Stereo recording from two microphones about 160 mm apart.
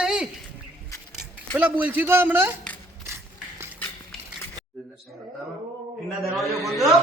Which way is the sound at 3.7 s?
10° left (ahead or behind).